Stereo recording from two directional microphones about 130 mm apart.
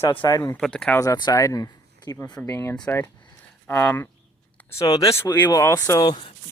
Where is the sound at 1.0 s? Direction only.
30° left (ahead or behind).